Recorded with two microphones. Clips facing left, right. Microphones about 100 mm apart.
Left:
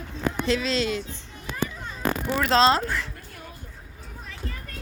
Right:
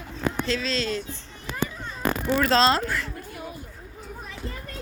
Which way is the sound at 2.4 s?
15° left (ahead or behind).